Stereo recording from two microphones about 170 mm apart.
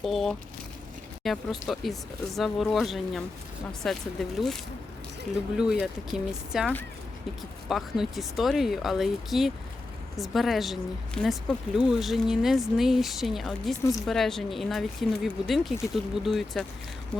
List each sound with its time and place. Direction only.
0.0 s speech: centre (ahead or behind)